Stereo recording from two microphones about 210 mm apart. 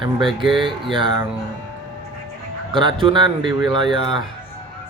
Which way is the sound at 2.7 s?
25° right (ahead or behind).